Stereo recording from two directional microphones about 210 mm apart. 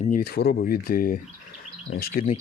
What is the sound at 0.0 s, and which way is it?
Speech, 45° left (ahead or behind).